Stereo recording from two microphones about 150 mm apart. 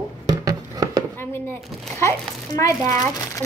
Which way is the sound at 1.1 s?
15° left (ahead or behind).